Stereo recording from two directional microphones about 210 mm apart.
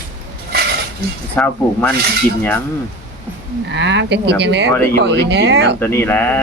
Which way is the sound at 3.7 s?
55° right (ahead or behind).